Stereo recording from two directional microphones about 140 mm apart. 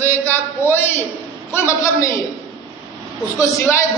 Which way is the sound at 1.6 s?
20° left (ahead or behind).